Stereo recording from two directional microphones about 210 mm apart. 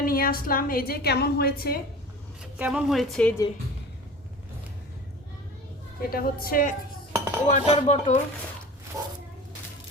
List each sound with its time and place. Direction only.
0.0 s a woman's voice: 45° left (ahead or behind)
2.4 s a woman's voice: 5° right (ahead or behind)
6.0 s a woman's voice: 45° left (ahead or behind)
8.9 s speech: 15° right (ahead or behind)